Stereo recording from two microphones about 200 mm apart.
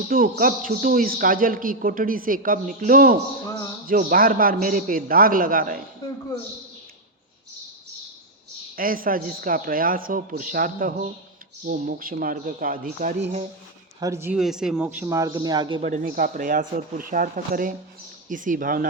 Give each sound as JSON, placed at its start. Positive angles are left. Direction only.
{"t": 0.1, "sound": "a man's voice", "side_deg": -45}
{"t": 3.4, "sound": "speech", "side_deg": 15}
{"t": 3.8, "sound": "a man's voice", "side_deg": -45}
{"t": 6.0, "sound": "a sound", "side_deg": 20}
{"t": 8.7, "sound": "a man's voice", "side_deg": -45}
{"t": 14.0, "sound": "a man's voice", "side_deg": -15}
{"t": 16.0, "sound": "a man's voice", "side_deg": -45}